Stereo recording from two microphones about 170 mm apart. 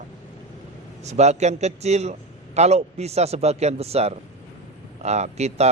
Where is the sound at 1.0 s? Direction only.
40° right (ahead or behind).